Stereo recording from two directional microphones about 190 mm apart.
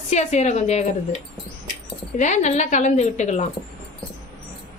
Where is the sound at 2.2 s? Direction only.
40° left (ahead or behind).